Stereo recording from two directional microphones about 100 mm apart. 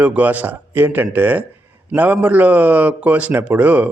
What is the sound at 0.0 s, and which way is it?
Speech, 15° right (ahead or behind).